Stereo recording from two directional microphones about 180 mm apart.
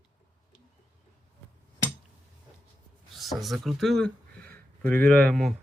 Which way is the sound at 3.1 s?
Centre (ahead or behind).